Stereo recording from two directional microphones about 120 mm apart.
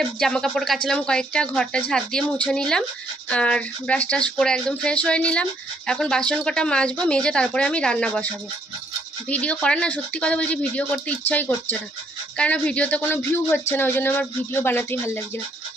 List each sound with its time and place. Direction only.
0.2 s speech: 5° left (ahead or behind)
9.3 s speech: 10° left (ahead or behind)